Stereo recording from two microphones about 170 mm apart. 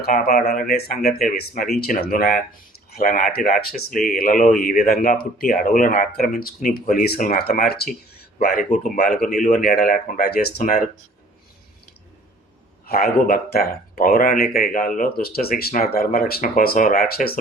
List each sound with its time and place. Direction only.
0.0 s speech: 65° left (ahead or behind)
8.7 s speech: 50° left (ahead or behind)
10.6 s speech: 50° left (ahead or behind)
12.8 s speech: 65° left (ahead or behind)